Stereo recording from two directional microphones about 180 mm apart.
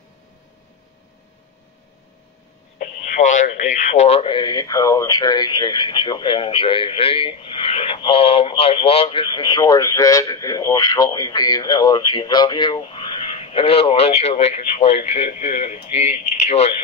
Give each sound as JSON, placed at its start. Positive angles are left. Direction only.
{"t": 2.8, "sound": "speech", "side_deg": 45}